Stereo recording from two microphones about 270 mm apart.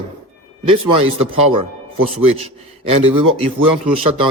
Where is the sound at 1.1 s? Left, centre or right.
Centre.